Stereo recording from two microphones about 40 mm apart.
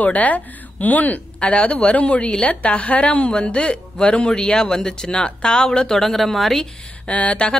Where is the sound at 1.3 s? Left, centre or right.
Left.